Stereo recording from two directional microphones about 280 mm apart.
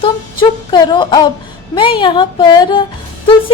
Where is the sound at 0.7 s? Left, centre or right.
Centre.